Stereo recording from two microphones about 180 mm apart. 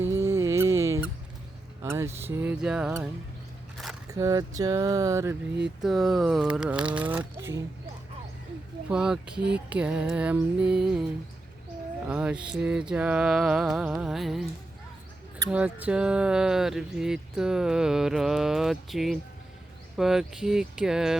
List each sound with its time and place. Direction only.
0.2 s squeak: 15° right (ahead or behind)
1.8 s speech: 15° right (ahead or behind)
4.1 s speech: 15° right (ahead or behind)
5.8 s speech: centre (ahead or behind)
8.9 s speech: 5° right (ahead or behind)
15.4 s speech: 5° right (ahead or behind)